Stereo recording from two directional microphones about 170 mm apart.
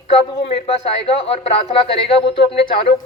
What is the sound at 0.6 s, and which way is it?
A man's voice, 35° left (ahead or behind).